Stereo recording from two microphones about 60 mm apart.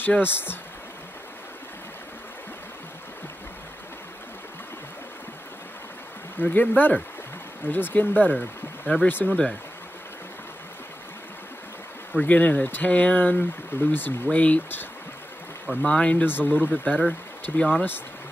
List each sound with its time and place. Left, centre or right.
0.0 s speech: left
6.3 s speech: left
12.1 s speech: left
16.3 s speech: left
17.6 s speech: centre